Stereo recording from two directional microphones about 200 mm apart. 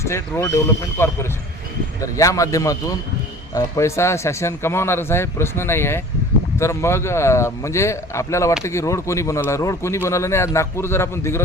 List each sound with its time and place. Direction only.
0.0 s speech: 15° left (ahead or behind)